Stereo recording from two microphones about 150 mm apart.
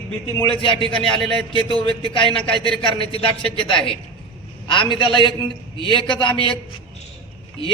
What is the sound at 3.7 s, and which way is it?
A man's voice, 35° left (ahead or behind).